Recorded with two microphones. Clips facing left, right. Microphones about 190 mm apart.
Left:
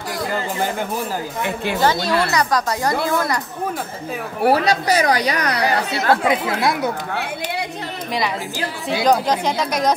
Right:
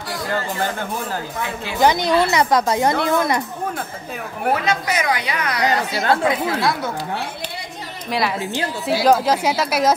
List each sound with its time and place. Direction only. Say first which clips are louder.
1.8 s a woman's voice: right 3 dB; 20° right (ahead or behind)
4.5 s a woman's voice: left 4 dB; 35° left (ahead or behind)
6.2 s speech: even; 20° left (ahead or behind)
9.0 s speech: right 1 dB; 5° right (ahead or behind)